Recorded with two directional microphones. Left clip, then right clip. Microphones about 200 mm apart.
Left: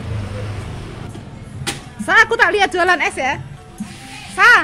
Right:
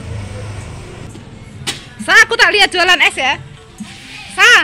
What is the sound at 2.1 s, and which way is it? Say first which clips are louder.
Speech: right 3 dB; centre (ahead or behind).